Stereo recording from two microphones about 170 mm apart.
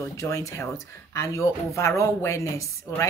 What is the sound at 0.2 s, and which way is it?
Speech, 20° left (ahead or behind).